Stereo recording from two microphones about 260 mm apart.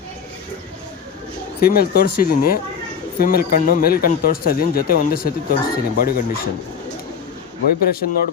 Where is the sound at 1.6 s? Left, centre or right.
Left.